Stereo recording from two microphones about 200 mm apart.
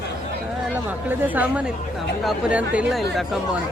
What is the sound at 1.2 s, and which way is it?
A woman's voice, 10° right (ahead or behind).